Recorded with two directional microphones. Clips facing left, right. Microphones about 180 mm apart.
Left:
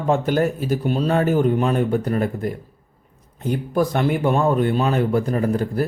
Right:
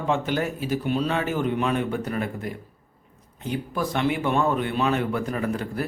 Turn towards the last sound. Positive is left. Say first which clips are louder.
# left 6 dB
turn(degrees=40)  # may be behind; listen again after turning